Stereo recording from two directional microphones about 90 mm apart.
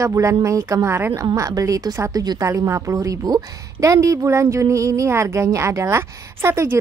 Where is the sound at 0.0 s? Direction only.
35° right (ahead or behind).